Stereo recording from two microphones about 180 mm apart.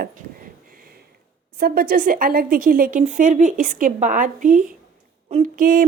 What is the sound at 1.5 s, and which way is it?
A woman's voice, 60° right (ahead or behind).